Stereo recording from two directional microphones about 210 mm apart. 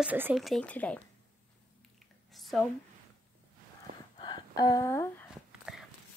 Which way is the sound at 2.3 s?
Centre (ahead or behind).